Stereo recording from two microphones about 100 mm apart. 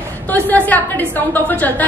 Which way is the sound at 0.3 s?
15° left (ahead or behind).